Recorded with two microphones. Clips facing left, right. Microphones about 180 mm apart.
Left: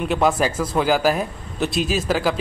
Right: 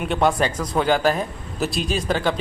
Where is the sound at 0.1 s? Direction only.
5° left (ahead or behind).